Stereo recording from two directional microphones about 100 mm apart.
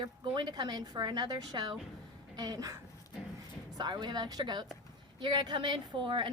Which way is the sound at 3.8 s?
45° right (ahead or behind).